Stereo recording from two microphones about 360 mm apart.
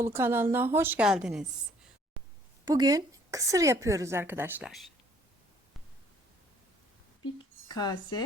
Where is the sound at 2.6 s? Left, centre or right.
Centre.